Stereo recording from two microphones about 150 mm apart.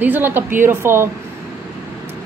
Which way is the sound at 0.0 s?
10° right (ahead or behind).